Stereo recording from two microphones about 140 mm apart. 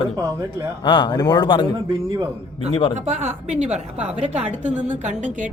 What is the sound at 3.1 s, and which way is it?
Speech, 55° right (ahead or behind).